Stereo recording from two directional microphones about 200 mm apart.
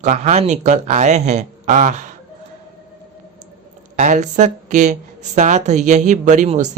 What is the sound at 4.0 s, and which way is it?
Speech, 40° right (ahead or behind).